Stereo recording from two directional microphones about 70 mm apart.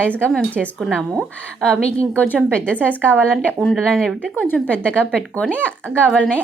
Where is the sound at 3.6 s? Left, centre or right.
Centre.